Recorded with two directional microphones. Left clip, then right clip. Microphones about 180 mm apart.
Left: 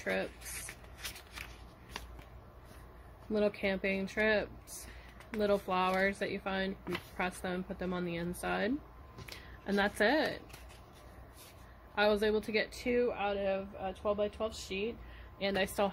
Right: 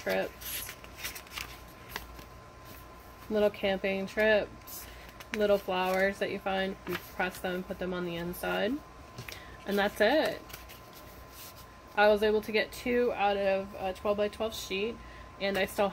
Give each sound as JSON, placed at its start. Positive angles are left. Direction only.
{"t": 0.0, "sound": "speech", "side_deg": 15}
{"t": 3.3, "sound": "speech", "side_deg": 15}
{"t": 11.9, "sound": "speech", "side_deg": 20}
{"t": 14.7, "sound": "speech", "side_deg": 10}